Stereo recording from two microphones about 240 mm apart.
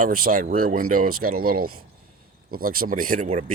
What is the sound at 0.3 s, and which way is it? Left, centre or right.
Speech, right.